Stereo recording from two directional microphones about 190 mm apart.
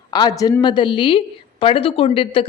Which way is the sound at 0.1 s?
20° left (ahead or behind).